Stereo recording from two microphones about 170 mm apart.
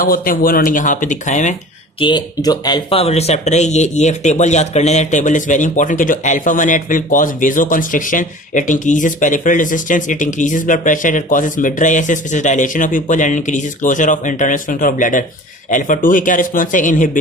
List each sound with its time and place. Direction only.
0.0 s speech: 55° left (ahead or behind)
2.0 s speech: 25° left (ahead or behind); by 17.2 s 50° left (ahead or behind)